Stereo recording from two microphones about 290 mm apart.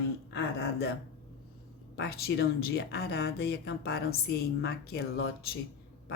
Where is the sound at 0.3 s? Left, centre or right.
Left.